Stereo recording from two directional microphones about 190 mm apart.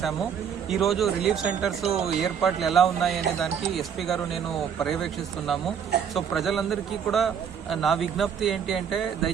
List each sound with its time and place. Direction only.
0.7 s speech: centre (ahead or behind)
6.1 s speech: centre (ahead or behind)